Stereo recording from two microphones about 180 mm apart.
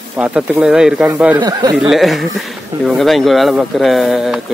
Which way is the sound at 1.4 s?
20° right (ahead or behind).